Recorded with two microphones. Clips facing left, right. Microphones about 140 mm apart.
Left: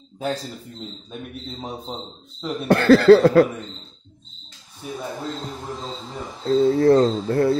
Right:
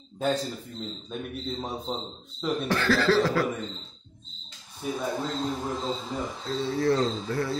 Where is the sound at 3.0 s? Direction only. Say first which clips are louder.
Left 11 dB; 55° left (ahead or behind).